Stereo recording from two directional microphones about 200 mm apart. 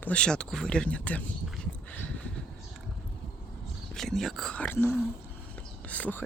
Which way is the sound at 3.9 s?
Centre (ahead or behind).